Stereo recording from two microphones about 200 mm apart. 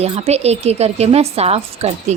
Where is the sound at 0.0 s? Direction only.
30° right (ahead or behind).